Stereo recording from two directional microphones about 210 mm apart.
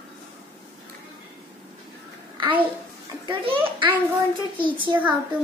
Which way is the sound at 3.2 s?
25° right (ahead or behind).